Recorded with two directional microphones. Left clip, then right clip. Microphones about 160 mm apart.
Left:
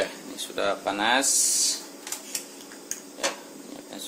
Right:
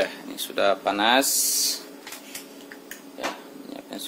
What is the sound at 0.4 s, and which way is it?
Speech, 45° right (ahead or behind).